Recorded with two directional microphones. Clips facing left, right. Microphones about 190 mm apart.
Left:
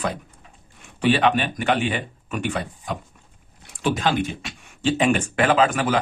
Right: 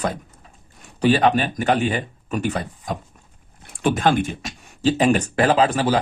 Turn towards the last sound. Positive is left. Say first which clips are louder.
# right 1 dB
turn(degrees=-35)  # may be behind; listen again after turning